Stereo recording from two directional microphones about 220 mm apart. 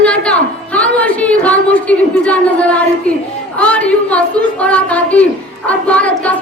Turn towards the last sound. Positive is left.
turn(degrees=5)  # may be behind; listen again after turning